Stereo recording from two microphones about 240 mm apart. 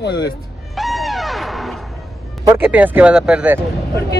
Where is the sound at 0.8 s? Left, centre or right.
Centre.